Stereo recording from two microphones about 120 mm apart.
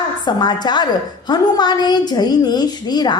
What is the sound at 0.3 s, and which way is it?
A woman's voice, 35° left (ahead or behind).